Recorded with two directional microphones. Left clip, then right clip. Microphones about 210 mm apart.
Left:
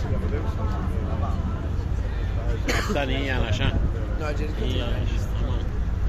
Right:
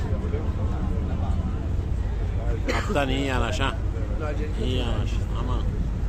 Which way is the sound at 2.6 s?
55° left (ahead or behind).